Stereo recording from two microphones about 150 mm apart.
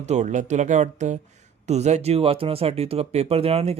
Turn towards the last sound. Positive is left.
turn(degrees=-40)  # may be behind; listen again after turning